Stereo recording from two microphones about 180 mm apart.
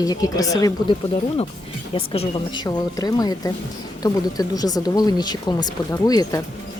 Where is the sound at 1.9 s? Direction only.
35° left (ahead or behind).